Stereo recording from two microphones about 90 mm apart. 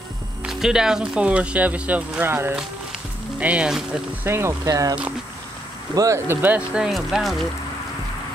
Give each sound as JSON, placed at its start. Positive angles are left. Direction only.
{"t": 0.4, "sound": "speech", "side_deg": -5}
{"t": 3.3, "sound": "speech", "side_deg": -15}
{"t": 4.2, "sound": "speech", "side_deg": -30}
{"t": 4.6, "sound": "speech", "side_deg": -40}
{"t": 5.9, "sound": "speech", "side_deg": -35}
{"t": 6.8, "sound": "speech", "side_deg": -5}